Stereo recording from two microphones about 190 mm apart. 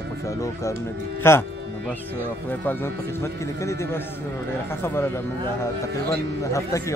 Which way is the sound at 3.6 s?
15° left (ahead or behind).